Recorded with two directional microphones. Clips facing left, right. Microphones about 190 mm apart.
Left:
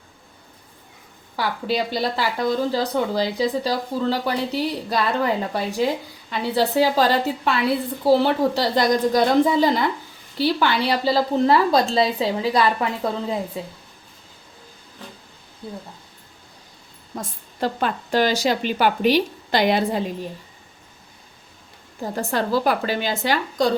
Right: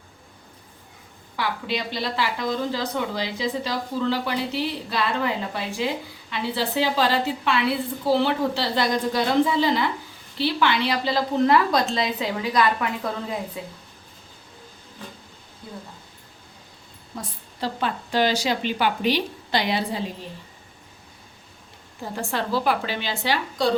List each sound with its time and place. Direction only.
1.4 s a woman's voice: 40° left (ahead or behind)
17.2 s a woman's voice: 50° left (ahead or behind)
22.1 s a woman's voice: 40° left (ahead or behind)